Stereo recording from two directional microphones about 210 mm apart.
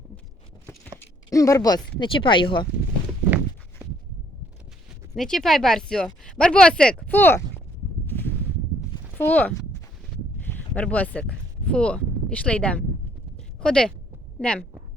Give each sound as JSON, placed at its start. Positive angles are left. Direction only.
{"t": 0.9, "sound": "speech", "side_deg": 15}
{"t": 3.2, "sound": "walk", "side_deg": -10}
{"t": 5.1, "sound": "speech", "side_deg": 0}
{"t": 8.0, "sound": "a sound", "side_deg": 10}
{"t": 10.5, "sound": "speech", "side_deg": 5}